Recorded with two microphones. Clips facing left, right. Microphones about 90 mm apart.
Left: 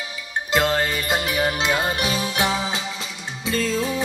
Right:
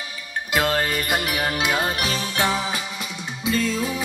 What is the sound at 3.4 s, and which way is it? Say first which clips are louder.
Music: right 1 dB; 35° left (ahead or behind).